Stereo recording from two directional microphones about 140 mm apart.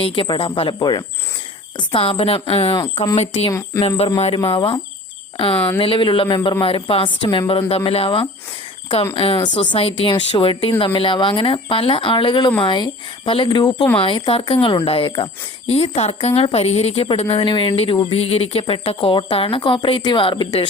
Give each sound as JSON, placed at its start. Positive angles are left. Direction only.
{"t": 0.0, "sound": "a woman's voice", "side_deg": 40}
{"t": 1.9, "sound": "a woman's voice", "side_deg": 40}
{"t": 5.8, "sound": "a woman's voice", "side_deg": 40}